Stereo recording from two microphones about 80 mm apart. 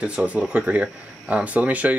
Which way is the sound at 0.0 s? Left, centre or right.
Centre.